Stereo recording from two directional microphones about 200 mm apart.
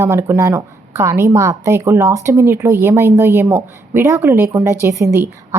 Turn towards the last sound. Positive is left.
turn(degrees=-15)  # may be behind; listen again after turning